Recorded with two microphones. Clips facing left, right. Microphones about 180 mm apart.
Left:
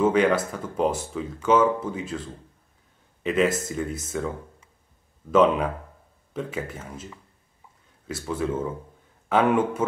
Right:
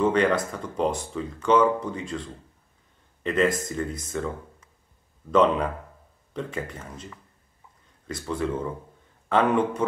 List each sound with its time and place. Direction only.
0.0 s speech: 5° left (ahead or behind)